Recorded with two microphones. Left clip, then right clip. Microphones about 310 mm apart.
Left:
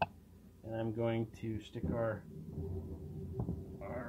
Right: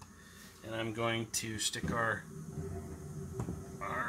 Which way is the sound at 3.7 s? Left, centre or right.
Right.